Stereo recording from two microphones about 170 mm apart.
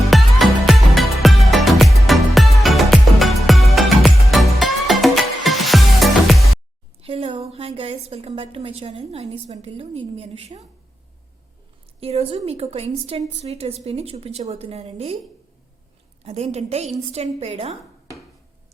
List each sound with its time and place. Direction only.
0.1 s music: centre (ahead or behind)
7.0 s a sound: 35° right (ahead or behind)
8.0 s a woman's voice: 35° right (ahead or behind)
11.9 s a woman's voice: 35° right (ahead or behind)
16.2 s a woman's voice: 40° right (ahead or behind)